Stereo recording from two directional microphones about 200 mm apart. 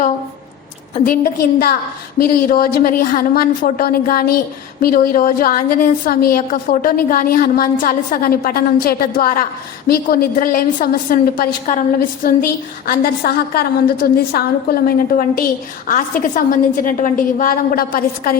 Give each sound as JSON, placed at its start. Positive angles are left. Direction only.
{"t": 0.9, "sound": "a woman's voice", "side_deg": 45}